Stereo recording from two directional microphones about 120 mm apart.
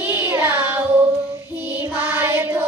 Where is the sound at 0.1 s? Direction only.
20° right (ahead or behind).